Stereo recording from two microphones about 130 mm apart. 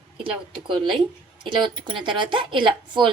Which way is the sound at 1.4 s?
35° right (ahead or behind).